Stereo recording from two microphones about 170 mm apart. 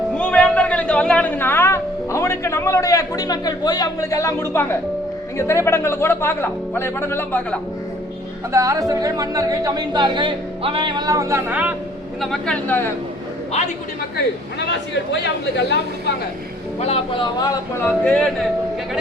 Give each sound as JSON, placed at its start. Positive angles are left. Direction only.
{"t": 0.2, "sound": "a woman's voice", "side_deg": 5}
{"t": 8.5, "sound": "a woman's voice", "side_deg": -20}
{"t": 12.2, "sound": "speech", "side_deg": 5}
{"t": 14.7, "sound": "speech", "side_deg": 90}
{"t": 16.8, "sound": "speech", "side_deg": 35}
{"t": 17.5, "sound": "speech", "side_deg": 15}